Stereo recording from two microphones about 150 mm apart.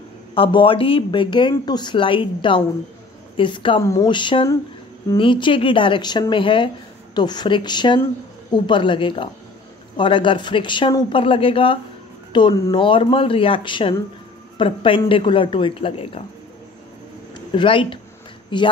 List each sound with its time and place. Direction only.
0.3 s speech: 35° left (ahead or behind)
3.8 s speech: 20° left (ahead or behind)
4.1 s speech: 30° left (ahead or behind)
17.6 s speech: 35° left (ahead or behind)